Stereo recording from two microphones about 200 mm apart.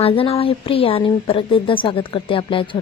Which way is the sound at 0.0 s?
30° left (ahead or behind).